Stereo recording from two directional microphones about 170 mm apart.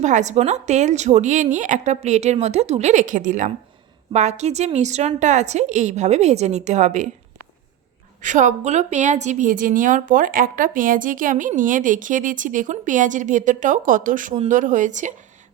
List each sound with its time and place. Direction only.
0.0 s a woman's voice: 45° right (ahead or behind)
8.2 s a woman's voice: 45° right (ahead or behind)